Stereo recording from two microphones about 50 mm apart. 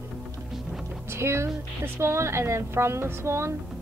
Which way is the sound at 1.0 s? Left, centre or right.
Right.